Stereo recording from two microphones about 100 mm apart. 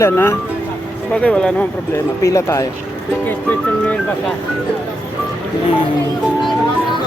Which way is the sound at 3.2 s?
15° left (ahead or behind).